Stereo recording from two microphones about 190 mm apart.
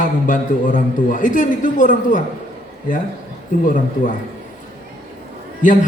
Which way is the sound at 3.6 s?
45° left (ahead or behind).